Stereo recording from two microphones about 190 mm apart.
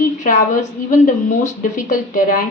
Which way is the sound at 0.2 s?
45° left (ahead or behind).